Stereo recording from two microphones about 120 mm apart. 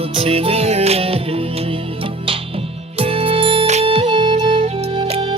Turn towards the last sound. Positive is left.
turn(degrees=-50)  # may be behind; listen again after turning